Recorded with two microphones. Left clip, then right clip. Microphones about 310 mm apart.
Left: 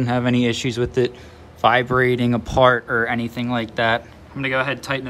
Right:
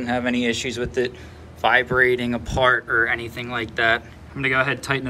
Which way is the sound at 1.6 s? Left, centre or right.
Left.